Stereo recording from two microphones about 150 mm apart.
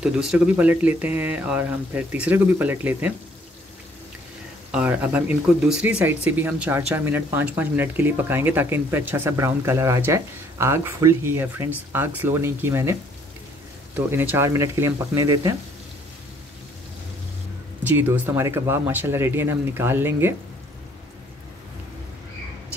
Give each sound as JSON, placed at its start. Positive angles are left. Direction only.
{"t": 0.0, "sound": "speech", "side_deg": -5}
{"t": 4.6, "sound": "speech", "side_deg": -10}
{"t": 13.9, "sound": "speech", "side_deg": -10}
{"t": 17.8, "sound": "speech", "side_deg": -10}